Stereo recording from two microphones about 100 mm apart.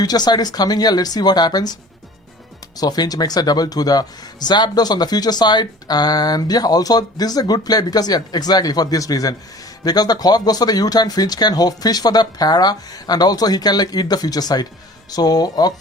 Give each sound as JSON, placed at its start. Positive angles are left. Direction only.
{"t": 0.0, "sound": "speech", "side_deg": 45}
{"t": 2.7, "sound": "speech", "side_deg": 40}